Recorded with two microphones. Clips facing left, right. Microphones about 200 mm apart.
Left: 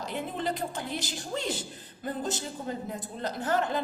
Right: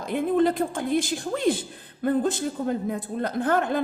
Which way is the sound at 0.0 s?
50° right (ahead or behind).